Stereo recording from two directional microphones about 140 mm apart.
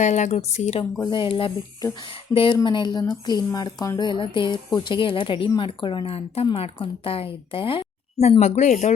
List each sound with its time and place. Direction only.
0.0 s speech: 55° left (ahead or behind)
1.1 s a woman's voice: 40° left (ahead or behind); by 8.9 s 55° left (ahead or behind)